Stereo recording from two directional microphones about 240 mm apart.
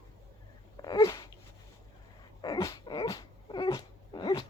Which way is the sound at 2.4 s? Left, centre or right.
Centre.